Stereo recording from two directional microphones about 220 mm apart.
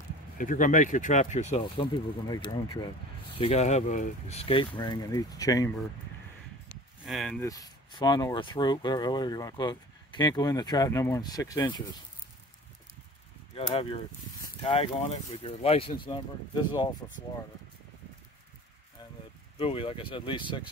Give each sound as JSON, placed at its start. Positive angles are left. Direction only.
{"t": 0.4, "sound": "speech", "side_deg": 35}
{"t": 7.1, "sound": "speech", "side_deg": 0}
{"t": 7.4, "sound": "speech", "side_deg": 15}
{"t": 14.4, "sound": "speech", "side_deg": 25}
{"t": 19.6, "sound": "speech", "side_deg": 25}